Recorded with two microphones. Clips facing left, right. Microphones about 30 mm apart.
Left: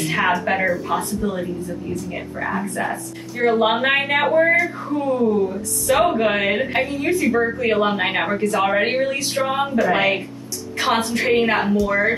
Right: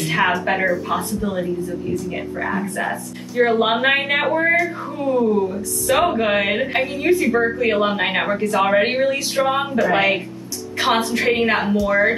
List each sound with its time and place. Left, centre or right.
0.0 s a woman's voice: centre
2.6 s speech: right
3.4 s a woman's voice: centre
11.3 s a woman's voice: centre